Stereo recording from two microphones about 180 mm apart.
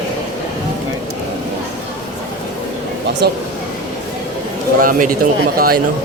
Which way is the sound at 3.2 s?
65° right (ahead or behind).